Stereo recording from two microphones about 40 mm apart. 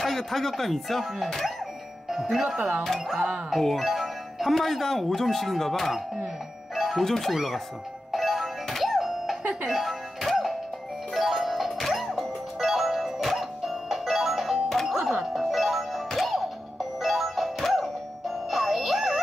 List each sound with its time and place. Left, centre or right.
0.0 s speech: centre
2.3 s speech: centre
6.7 s music: centre
7.0 s speech: centre
8.1 s music: centre
12.5 s music: centre